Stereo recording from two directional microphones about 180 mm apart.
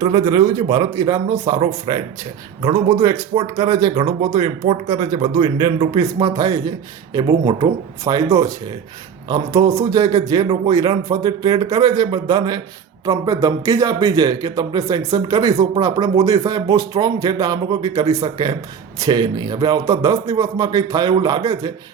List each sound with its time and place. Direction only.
0.0 s a man's voice: 20° right (ahead or behind)